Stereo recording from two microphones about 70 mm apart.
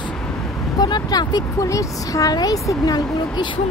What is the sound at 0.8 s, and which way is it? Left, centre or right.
Speech, left.